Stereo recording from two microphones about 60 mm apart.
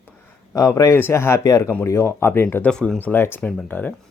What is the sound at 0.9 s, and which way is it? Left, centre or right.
Speech, left.